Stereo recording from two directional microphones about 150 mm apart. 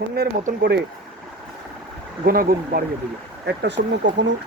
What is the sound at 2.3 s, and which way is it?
Speech, 80° right.